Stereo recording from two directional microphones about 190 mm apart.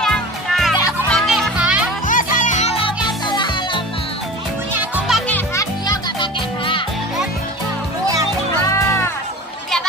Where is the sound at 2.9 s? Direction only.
25° left (ahead or behind).